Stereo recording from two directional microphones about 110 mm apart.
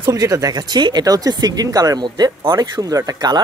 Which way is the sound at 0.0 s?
30° right (ahead or behind).